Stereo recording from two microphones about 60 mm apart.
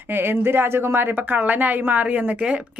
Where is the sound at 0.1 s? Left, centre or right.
Right.